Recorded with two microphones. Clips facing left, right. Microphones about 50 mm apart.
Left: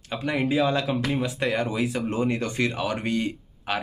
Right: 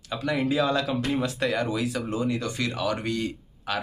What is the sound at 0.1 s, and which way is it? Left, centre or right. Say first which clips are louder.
Speech: left 1 dB; left.